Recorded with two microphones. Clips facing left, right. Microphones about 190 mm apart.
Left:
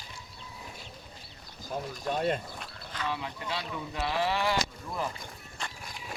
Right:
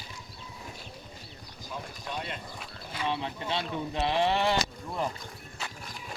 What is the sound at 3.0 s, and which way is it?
Speech, 25° right (ahead or behind).